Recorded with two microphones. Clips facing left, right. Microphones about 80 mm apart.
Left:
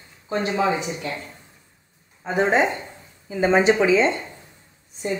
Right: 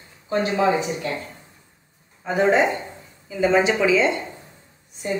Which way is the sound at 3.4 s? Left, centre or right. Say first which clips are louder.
Left 1 dB; left.